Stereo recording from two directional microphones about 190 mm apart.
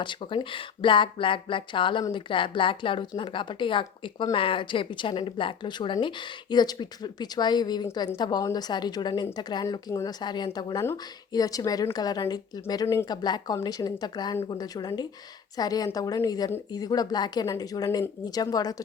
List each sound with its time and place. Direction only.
0.0 s speech: 25° left (ahead or behind)